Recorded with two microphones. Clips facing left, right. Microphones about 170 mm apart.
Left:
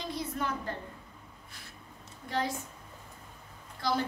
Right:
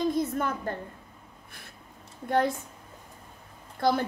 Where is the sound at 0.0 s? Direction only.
50° right (ahead or behind).